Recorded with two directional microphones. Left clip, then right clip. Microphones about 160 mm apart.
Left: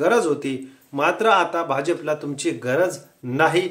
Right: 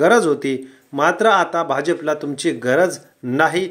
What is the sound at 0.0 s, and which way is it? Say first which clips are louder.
Speech: right 5 dB; 30° right (ahead or behind).